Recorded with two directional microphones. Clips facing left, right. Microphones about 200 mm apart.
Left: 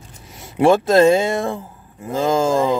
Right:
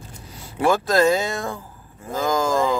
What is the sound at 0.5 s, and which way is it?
Speech, 25° left (ahead or behind).